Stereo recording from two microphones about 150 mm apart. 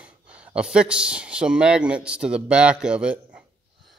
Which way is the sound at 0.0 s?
10° right (ahead or behind).